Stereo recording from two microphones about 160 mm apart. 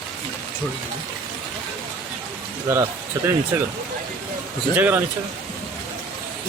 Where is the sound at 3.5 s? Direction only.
15° right (ahead or behind).